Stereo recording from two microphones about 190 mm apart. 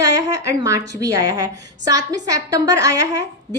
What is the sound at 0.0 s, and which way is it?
A woman's voice, 15° right (ahead or behind).